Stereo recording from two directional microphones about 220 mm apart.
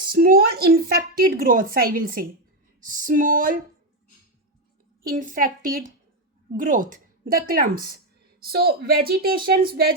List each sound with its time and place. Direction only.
0.1 s a woman's voice: 40° right (ahead or behind)
5.0 s a woman's voice: 35° right (ahead or behind)